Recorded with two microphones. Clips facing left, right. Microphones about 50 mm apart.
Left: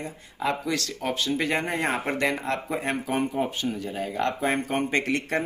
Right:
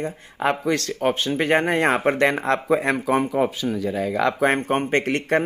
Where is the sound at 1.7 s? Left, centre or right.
Right.